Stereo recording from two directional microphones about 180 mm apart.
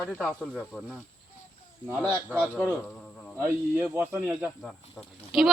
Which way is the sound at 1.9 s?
5° left (ahead or behind).